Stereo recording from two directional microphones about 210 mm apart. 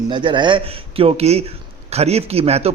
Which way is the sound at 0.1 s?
20° right (ahead or behind).